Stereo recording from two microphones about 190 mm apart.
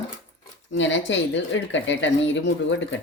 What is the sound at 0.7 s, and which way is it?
A woman's voice, 75° left (ahead or behind).